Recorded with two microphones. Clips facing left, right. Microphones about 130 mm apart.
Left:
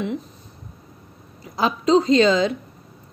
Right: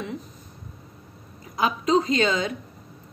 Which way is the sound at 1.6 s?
30° left (ahead or behind).